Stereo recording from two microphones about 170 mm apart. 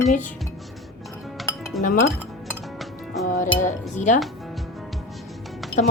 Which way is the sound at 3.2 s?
50° left (ahead or behind).